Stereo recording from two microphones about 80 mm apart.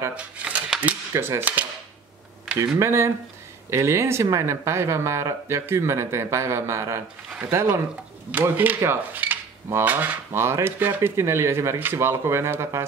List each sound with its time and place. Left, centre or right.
0.1 s speech: centre
1.1 s speech: right
1.4 s speech: right
2.6 s speech: right
7.2 s a sound: centre
7.5 s speech: right
8.3 s speech: right